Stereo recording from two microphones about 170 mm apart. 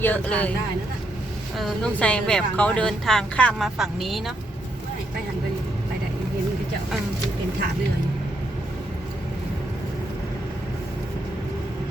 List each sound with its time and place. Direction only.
0.0 s speech: 10° left (ahead or behind)
1.5 s speech: 5° left (ahead or behind)